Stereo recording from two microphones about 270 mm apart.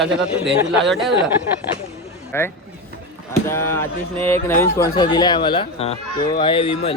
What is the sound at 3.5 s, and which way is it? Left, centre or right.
Speech, centre.